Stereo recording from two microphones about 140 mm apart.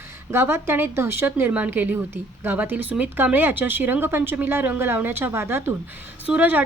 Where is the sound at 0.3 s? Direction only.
15° right (ahead or behind).